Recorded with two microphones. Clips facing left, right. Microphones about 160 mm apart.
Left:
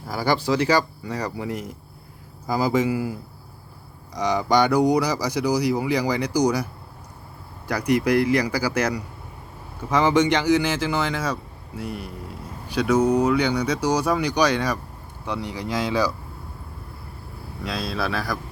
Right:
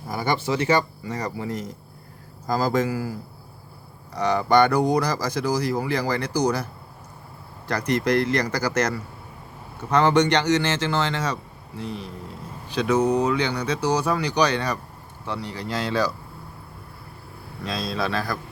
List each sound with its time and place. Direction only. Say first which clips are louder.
0.1 s speech: left 2 dB; 20° right (ahead or behind)
1.1 s speech: left 1 dB; 10° left (ahead or behind)
7.7 s speech: left 2 dB; 10° left (ahead or behind)
17.6 s speech: even; 10° left (ahead or behind)